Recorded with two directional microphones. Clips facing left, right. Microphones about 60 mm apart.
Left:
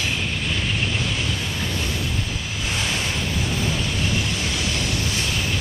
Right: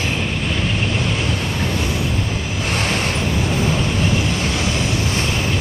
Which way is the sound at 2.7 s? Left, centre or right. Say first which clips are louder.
Right 5 dB; right.